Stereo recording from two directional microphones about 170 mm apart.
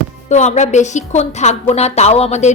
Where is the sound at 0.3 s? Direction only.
45° left (ahead or behind).